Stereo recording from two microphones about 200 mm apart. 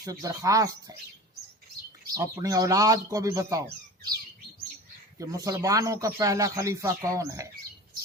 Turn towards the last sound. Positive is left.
turn(degrees=-15)  # may be behind; listen again after turning